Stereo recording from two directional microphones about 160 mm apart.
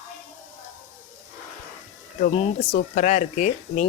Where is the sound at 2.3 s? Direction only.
40° left (ahead or behind).